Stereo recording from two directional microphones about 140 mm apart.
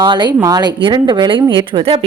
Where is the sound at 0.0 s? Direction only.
35° right (ahead or behind).